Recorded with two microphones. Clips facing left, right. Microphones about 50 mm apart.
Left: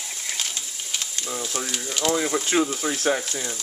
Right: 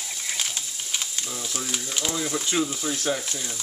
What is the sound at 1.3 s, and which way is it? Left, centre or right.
Speech, centre.